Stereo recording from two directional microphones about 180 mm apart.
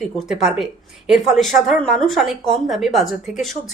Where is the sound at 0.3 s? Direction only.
5° right (ahead or behind).